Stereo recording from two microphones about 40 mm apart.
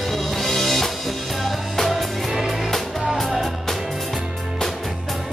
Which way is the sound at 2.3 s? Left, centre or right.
Centre.